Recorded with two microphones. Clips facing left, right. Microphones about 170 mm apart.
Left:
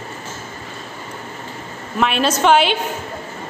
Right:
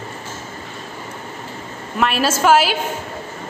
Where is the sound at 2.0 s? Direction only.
5° right (ahead or behind).